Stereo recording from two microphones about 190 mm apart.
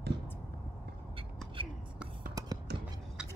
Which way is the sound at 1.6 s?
25° right (ahead or behind).